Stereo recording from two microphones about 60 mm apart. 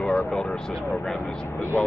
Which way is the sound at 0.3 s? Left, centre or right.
Centre.